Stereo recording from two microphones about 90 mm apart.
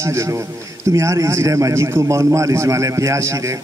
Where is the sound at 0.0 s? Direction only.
35° right (ahead or behind).